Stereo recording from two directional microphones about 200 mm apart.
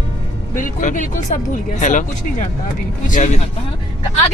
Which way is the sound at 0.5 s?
40° left (ahead or behind).